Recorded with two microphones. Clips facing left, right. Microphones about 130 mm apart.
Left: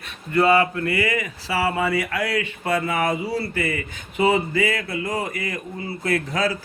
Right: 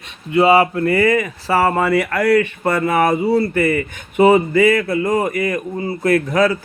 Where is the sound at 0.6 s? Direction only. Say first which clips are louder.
Right 7 dB; 35° right (ahead or behind).